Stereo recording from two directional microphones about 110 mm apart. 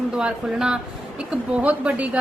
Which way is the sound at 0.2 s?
5° right (ahead or behind).